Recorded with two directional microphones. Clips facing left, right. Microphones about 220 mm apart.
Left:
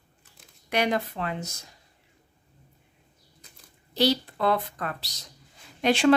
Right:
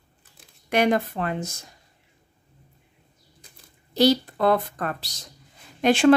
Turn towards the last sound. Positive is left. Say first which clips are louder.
# right 4 dB
turn(degrees=-50)  # may be behind; listen again after turning